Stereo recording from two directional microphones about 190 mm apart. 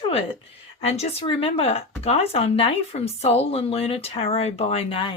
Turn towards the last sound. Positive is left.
turn(degrees=30)  # may be behind; listen again after turning